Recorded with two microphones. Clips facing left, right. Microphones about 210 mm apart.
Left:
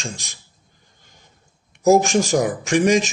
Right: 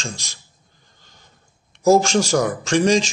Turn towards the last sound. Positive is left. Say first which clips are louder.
# even
turn(degrees=15)  # may be behind; listen again after turning